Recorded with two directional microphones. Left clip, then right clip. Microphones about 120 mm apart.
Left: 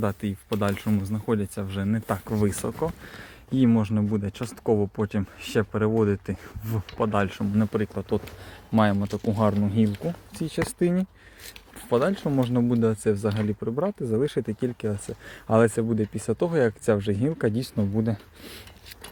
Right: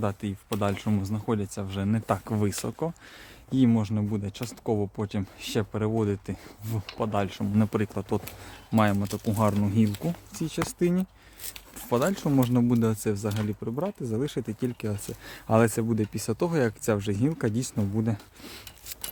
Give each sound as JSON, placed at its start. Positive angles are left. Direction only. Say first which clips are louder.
{"t": 0.0, "sound": "speech", "louder": "left 2 dB", "side_deg": -5}
{"t": 1.9, "sound": "speech", "louder": "right 1 dB", "side_deg": -25}
{"t": 3.5, "sound": "speech", "louder": "left 2 dB", "side_deg": -15}
{"t": 7.5, "sound": "speech", "louder": "right 1 dB", "side_deg": -55}
{"t": 8.7, "sound": "speech", "louder": "left 2 dB", "side_deg": -30}
{"t": 10.4, "sound": "speech", "louder": "left 2 dB", "side_deg": -20}
{"t": 11.9, "sound": "speech", "louder": "left 2 dB", "side_deg": -40}
{"t": 13.1, "sound": "speech", "louder": "left 4 dB", "side_deg": -15}
{"t": 14.8, "sound": "speech", "louder": "left 4 dB", "side_deg": -35}